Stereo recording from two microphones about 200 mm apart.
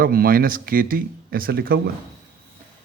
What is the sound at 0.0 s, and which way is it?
Speech, 45° right (ahead or behind).